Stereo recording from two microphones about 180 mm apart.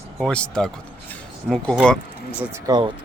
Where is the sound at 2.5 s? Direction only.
20° right (ahead or behind).